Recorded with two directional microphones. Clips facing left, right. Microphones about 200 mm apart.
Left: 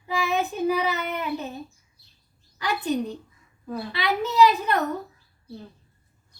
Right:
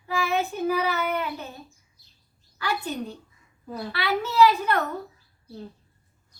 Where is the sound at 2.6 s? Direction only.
15° left (ahead or behind).